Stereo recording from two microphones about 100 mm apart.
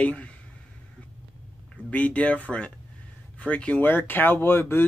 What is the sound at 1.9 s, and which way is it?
Speech, 15° left (ahead or behind).